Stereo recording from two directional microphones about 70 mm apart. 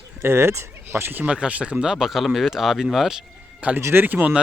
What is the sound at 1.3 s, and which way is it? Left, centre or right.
Speech, centre.